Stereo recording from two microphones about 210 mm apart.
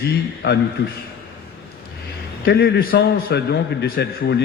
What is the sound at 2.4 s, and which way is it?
A man's voice, 50° left (ahead or behind).